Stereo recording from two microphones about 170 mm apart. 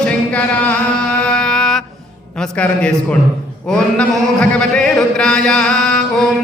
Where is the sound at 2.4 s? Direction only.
5° left (ahead or behind).